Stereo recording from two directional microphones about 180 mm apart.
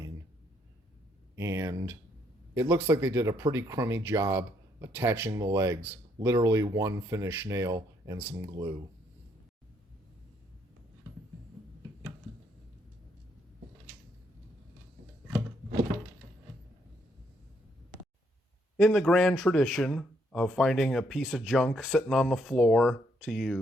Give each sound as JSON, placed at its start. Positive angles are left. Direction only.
{"t": 1.4, "sound": "speech", "side_deg": -15}
{"t": 18.8, "sound": "speech", "side_deg": 5}